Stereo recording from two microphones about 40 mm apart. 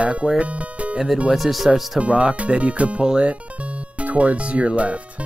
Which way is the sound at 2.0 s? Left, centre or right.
Right.